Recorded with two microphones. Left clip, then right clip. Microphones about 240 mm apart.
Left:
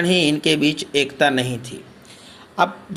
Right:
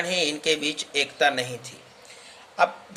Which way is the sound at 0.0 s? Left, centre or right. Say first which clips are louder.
Left 7 dB; left.